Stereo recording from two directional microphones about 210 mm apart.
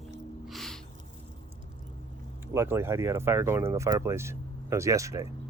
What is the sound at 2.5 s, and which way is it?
Speech, 10° right (ahead or behind).